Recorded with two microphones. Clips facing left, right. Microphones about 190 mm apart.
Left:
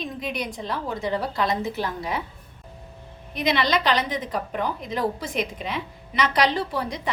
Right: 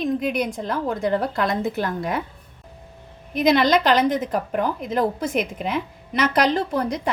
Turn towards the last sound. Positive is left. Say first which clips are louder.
# right 5 dB
turn(degrees=-45)  # may be behind; listen again after turning